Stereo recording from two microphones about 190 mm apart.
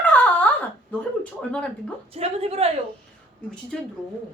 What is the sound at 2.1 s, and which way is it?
Speech, 30° right (ahead or behind).